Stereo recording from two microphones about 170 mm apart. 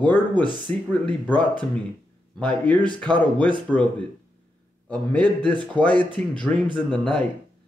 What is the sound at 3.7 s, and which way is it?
Speech, 5° left (ahead or behind).